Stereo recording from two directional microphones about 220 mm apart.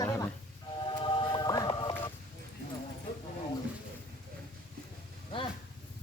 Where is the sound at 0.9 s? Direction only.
20° left (ahead or behind).